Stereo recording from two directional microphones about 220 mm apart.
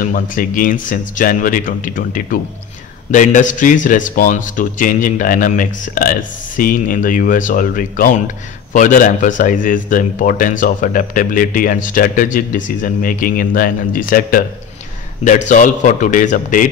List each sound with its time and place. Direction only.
0.0 s a man's voice: 40° left (ahead or behind)